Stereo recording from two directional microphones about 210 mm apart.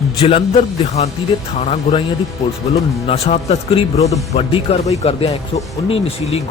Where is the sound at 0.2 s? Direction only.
25° left (ahead or behind).